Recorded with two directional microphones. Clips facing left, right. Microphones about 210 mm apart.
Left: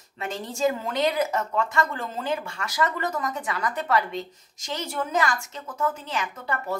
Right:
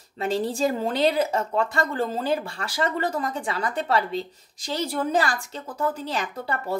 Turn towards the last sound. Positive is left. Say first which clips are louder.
# right 1 dB
turn(degrees=-35)  # may be behind; listen again after turning